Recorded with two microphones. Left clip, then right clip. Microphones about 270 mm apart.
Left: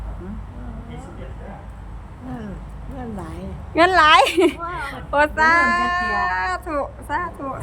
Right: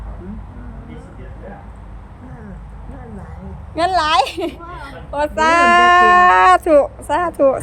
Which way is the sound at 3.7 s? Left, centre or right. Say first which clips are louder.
Left 2 dB; centre.